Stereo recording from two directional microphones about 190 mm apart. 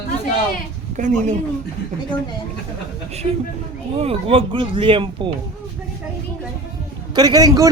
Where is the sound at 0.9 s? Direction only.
40° right (ahead or behind).